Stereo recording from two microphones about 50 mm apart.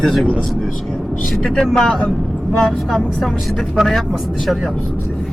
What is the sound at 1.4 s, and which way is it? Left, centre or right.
Speech, centre.